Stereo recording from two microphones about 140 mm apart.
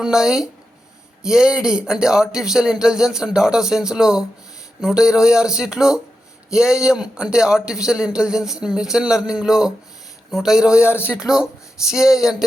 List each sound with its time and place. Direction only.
0.0 s a man's voice: 5° right (ahead or behind)
10.8 s speech: 15° left (ahead or behind)
11.1 s a man's voice: 5° right (ahead or behind)